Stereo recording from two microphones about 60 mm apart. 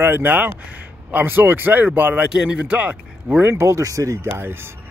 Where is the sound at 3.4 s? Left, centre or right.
Right.